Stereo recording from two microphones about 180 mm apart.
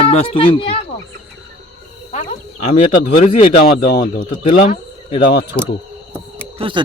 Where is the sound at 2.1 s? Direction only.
40° left (ahead or behind).